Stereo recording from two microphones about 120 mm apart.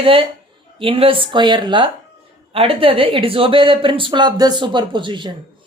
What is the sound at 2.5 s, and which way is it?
Speech, 50° right (ahead or behind).